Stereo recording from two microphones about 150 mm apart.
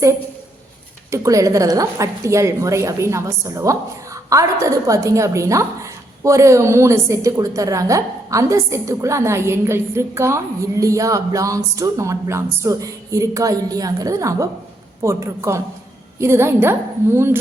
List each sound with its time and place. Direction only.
1.1 s a woman's voice: 20° right (ahead or behind)